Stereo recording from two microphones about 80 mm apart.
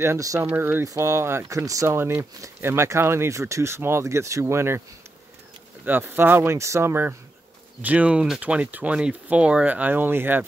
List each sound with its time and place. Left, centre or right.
0.0 s speech: right
0.6 s speech: right
0.8 s speech: right
2.0 s speech: right
5.9 s speech: right
7.8 s speech: centre